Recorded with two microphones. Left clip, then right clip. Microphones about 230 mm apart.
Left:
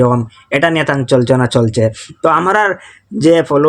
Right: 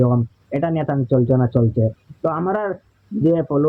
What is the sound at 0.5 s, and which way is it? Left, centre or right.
Speech, centre.